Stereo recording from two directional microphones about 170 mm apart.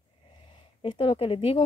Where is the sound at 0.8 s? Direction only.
30° left (ahead or behind).